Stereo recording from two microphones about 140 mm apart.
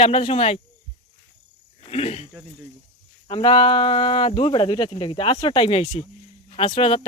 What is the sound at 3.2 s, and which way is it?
Speech, 40° left (ahead or behind).